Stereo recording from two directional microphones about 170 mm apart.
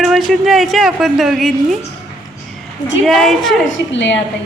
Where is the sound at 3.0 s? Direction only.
Centre (ahead or behind).